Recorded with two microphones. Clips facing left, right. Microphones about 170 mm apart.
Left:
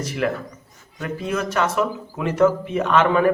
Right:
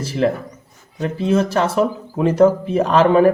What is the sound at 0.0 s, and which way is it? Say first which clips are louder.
Speech: right 5 dB; 30° right (ahead or behind).